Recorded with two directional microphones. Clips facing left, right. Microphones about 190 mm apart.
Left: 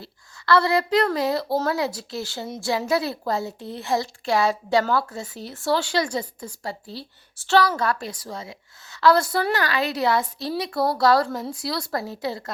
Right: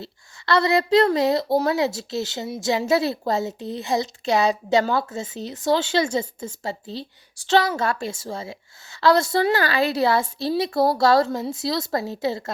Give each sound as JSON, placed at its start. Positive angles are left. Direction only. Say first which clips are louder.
{"t": 0.0, "sound": "a woman's voice", "louder": "right 1 dB", "side_deg": -20}